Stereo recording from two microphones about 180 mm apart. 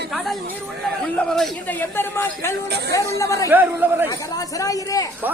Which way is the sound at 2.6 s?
65° right (ahead or behind).